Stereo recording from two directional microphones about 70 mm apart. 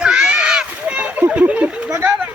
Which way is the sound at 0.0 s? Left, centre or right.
Centre.